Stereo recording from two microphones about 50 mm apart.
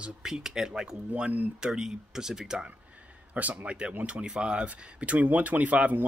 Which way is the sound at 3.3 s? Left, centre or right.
Right.